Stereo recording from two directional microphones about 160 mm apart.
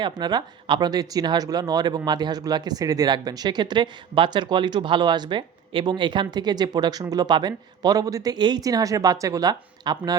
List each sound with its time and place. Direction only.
0.0 s speech: 25° right (ahead or behind)